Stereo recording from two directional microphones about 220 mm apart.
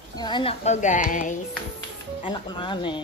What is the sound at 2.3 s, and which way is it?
Speech, 20° left (ahead or behind).